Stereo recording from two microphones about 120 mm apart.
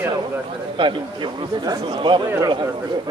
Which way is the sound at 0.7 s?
40° right (ahead or behind).